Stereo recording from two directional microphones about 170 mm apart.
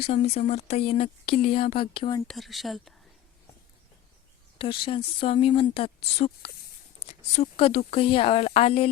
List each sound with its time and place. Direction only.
0.0 s speech: 40° left (ahead or behind)
2.2 s speech: centre (ahead or behind)
4.5 s speech: 30° left (ahead or behind)
7.0 s a sound: 40° left (ahead or behind)
7.5 s speech: 35° left (ahead or behind)